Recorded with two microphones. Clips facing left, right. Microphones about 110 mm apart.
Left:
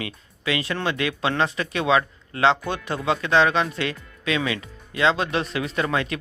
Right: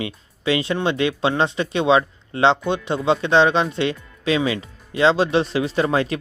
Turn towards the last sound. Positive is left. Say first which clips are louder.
# right 5 dB
turn(degrees=-30)  # may be behind; listen again after turning